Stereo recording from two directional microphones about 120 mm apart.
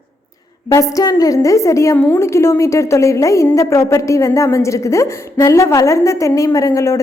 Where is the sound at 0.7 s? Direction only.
30° left (ahead or behind).